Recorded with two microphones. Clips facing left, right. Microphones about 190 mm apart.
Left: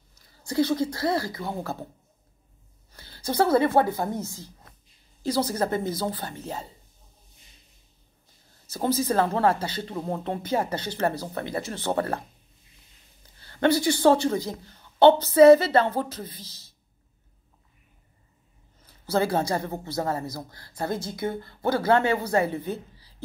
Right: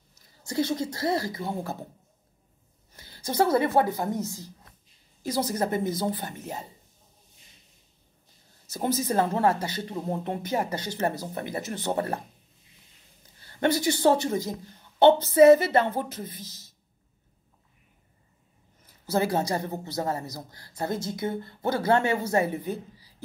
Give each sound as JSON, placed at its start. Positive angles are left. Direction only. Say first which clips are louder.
{"t": 0.1, "sound": "speech", "louder": "left 2 dB", "side_deg": -20}
{"t": 2.9, "sound": "a sound", "louder": "left 3 dB", "side_deg": -20}
{"t": 3.6, "sound": "speech", "louder": "left 2 dB", "side_deg": -15}
{"t": 8.6, "sound": "a sound", "louder": "left 2 dB", "side_deg": -20}
{"t": 9.0, "sound": "speech", "louder": "left 1 dB", "side_deg": -25}
{"t": 13.4, "sound": "speech", "louder": "left 3 dB", "side_deg": -20}
{"t": 19.0, "sound": "speech", "louder": "left 1 dB", "side_deg": -20}